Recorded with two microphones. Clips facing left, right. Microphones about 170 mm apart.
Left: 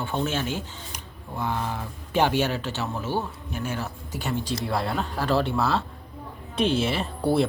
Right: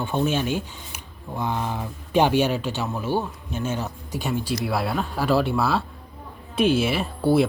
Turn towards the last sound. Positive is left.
turn(degrees=-5)  # may be behind; listen again after turning